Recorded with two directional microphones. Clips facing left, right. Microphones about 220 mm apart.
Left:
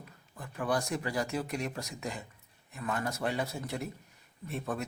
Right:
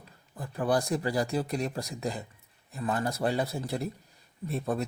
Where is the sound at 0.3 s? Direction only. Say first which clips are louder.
Right 4 dB; 35° right (ahead or behind).